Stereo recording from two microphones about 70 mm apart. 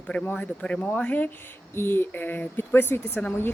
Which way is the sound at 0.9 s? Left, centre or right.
Left.